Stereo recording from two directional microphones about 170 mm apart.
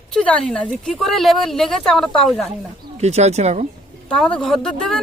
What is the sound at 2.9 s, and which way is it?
Speech, 40° right (ahead or behind).